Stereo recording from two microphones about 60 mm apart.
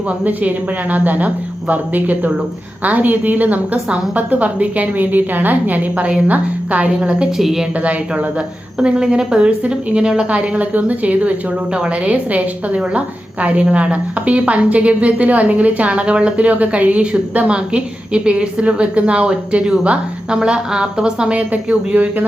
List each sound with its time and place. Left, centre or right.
0.3 s a woman's voice: right
7.3 s a woman's voice: centre
8.8 s a woman's voice: centre